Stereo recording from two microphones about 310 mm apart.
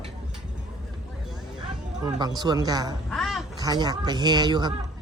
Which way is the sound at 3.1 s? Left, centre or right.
Centre.